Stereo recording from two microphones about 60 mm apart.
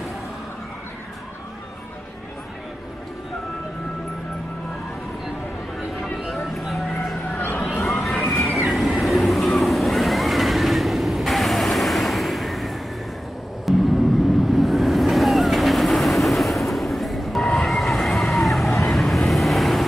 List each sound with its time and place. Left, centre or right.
6.2 s a sound: centre
7.5 s music: centre
8.6 s vehicle: centre